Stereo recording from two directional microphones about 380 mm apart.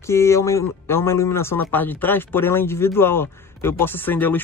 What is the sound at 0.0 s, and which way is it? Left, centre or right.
Speech, centre.